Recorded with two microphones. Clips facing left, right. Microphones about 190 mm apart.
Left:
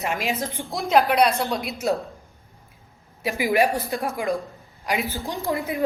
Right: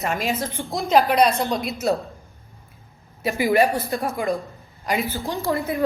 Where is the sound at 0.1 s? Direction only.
15° left (ahead or behind).